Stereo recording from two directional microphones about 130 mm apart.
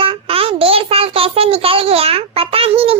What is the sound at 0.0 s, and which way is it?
A child's voice, 45° right (ahead or behind).